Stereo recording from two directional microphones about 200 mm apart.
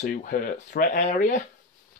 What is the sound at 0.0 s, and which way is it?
Speech, 45° left (ahead or behind).